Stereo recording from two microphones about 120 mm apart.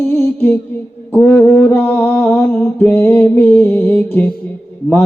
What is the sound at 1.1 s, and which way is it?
Mantra, 15° left (ahead or behind).